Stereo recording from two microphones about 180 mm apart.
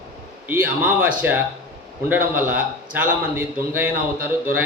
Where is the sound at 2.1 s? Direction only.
10° right (ahead or behind).